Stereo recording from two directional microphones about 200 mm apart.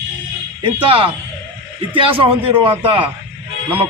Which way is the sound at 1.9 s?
25° right (ahead or behind).